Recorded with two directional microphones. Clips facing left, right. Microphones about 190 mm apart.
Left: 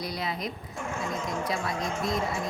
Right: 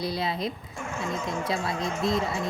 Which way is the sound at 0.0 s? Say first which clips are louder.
Right 4 dB; 30° right (ahead or behind).